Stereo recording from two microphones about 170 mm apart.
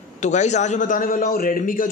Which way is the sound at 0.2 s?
45° left (ahead or behind).